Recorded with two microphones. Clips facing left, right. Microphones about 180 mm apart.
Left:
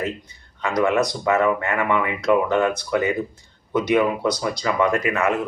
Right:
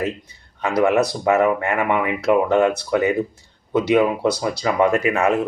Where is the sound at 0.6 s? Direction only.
20° right (ahead or behind).